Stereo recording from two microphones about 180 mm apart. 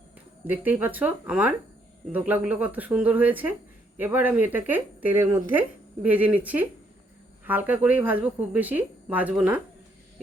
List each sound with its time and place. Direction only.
0.4 s speech: 10° right (ahead or behind)